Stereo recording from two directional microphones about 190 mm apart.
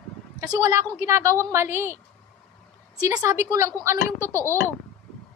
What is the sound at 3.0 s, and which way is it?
Speech, 20° right (ahead or behind).